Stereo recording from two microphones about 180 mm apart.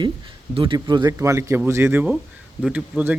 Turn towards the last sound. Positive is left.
turn(degrees=-10)  # may be behind; listen again after turning